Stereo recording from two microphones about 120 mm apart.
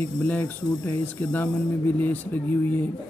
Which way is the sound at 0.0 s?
15° left (ahead or behind).